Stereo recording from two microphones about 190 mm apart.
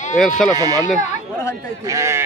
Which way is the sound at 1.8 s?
15° right (ahead or behind).